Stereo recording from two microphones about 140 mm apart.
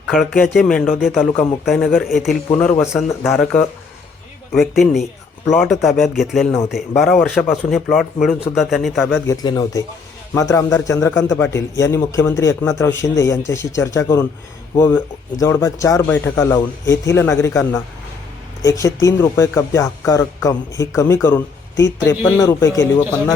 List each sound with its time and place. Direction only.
0.1 s speech: centre (ahead or behind)
2.8 s speech: 5° right (ahead or behind)
9.2 s speech: 25° left (ahead or behind)